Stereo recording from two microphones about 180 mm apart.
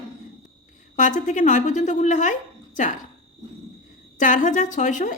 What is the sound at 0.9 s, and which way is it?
Speech, 45° left (ahead or behind).